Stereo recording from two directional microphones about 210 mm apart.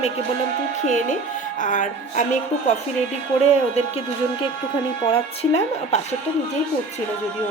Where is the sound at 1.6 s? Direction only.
35° left (ahead or behind).